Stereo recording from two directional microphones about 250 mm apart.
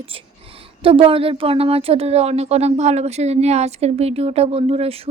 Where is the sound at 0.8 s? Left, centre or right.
Right.